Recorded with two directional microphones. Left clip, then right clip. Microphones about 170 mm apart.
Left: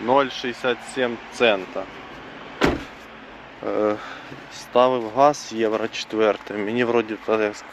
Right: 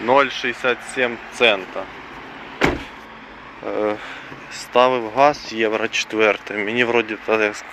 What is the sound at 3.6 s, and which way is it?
Speech, 40° left (ahead or behind).